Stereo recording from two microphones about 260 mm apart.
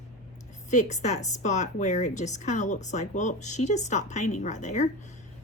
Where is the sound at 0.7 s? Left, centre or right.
Left.